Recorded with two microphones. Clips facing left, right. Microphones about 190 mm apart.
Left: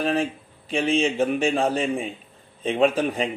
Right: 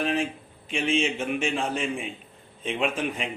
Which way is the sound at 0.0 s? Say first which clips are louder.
Left 3 dB; 40° left (ahead or behind).